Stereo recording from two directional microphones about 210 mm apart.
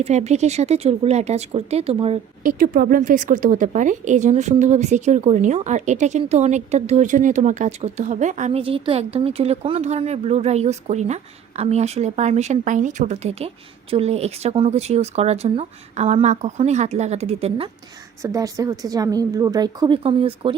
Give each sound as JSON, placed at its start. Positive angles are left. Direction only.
{"t": 0.0, "sound": "a woman's voice", "side_deg": -30}
{"t": 2.4, "sound": "a woman's voice", "side_deg": -40}
{"t": 18.2, "sound": "a woman's voice", "side_deg": -15}